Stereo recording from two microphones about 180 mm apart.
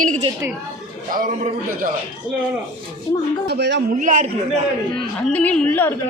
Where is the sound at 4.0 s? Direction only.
45° right (ahead or behind).